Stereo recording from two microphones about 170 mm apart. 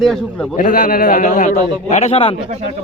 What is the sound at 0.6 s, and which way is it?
A man's voice, 55° left (ahead or behind).